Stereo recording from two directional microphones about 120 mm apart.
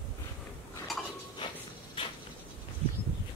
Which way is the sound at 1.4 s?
40° left (ahead or behind).